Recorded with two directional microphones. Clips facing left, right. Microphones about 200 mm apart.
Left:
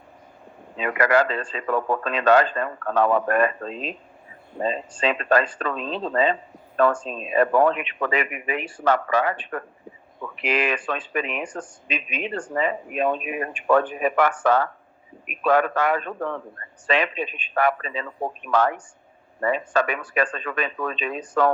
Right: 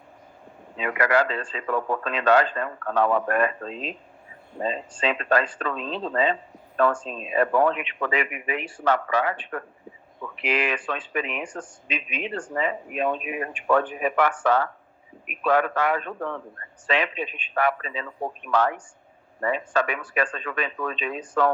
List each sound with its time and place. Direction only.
0.8 s speech: 45° left (ahead or behind)